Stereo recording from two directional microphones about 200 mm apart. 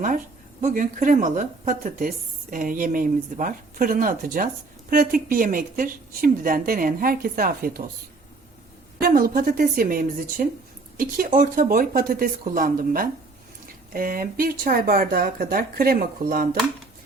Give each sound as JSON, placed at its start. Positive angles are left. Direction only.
{"t": 0.6, "sound": "speech", "side_deg": -40}
{"t": 9.0, "sound": "speech", "side_deg": -45}